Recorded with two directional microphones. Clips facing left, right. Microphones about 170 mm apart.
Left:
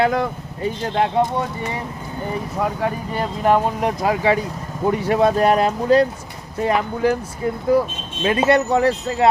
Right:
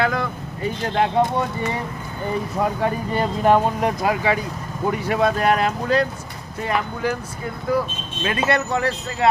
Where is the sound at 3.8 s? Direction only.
20° left (ahead or behind).